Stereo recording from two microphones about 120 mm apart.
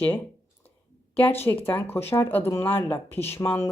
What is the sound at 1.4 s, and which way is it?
A woman's voice, 20° left (ahead or behind).